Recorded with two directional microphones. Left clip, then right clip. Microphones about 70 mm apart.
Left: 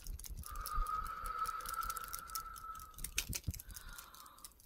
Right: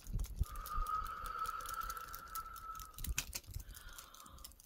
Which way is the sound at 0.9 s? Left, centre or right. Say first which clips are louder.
Right 2 dB; left.